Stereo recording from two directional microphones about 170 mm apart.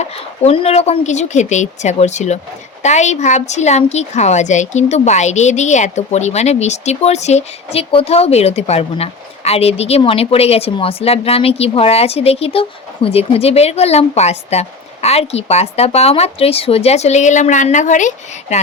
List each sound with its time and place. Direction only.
0.4 s a woman's voice: 35° left (ahead or behind)